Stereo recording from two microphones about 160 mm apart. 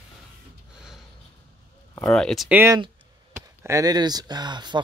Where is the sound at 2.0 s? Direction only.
5° left (ahead or behind).